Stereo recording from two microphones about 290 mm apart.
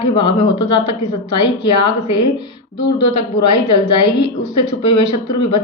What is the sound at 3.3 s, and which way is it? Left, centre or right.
Speech, left.